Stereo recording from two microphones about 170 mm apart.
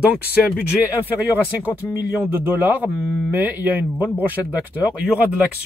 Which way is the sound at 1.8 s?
5° left (ahead or behind).